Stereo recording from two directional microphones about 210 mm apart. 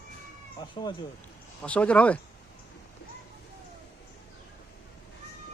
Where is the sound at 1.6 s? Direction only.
5° left (ahead or behind).